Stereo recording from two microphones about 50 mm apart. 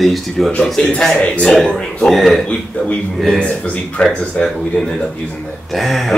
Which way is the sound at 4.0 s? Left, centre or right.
Left.